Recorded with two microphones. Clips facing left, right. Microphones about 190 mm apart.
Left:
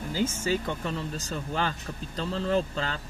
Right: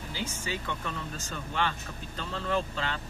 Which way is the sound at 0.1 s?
45° left (ahead or behind).